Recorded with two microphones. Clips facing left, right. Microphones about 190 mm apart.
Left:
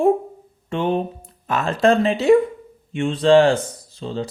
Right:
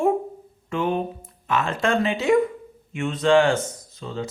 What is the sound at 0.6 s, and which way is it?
Speech, 30° left (ahead or behind).